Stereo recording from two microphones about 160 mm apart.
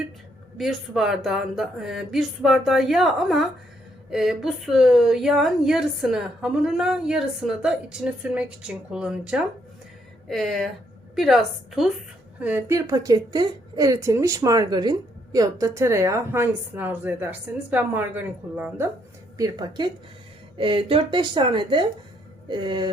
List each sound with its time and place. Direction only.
0.5 s a woman's voice: centre (ahead or behind)
19.4 s a woman's voice: 25° right (ahead or behind)